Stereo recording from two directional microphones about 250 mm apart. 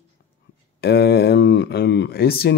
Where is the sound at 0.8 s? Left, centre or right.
Left.